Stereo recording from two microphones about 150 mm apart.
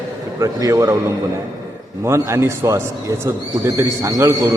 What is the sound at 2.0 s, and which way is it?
A man's voice, 20° right (ahead or behind).